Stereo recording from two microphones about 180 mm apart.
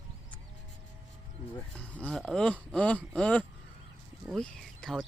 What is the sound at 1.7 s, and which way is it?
Speech, 5° left (ahead or behind).